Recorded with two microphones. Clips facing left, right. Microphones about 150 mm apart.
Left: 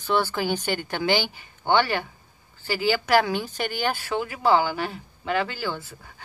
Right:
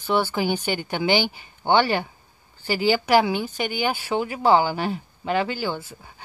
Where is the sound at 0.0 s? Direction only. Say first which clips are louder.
Right 2 dB; 10° right (ahead or behind).